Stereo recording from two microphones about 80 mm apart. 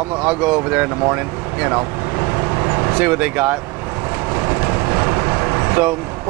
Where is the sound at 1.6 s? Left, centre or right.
Right.